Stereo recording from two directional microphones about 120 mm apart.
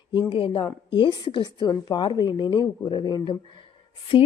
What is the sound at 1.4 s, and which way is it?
Speech, 30° left (ahead or behind).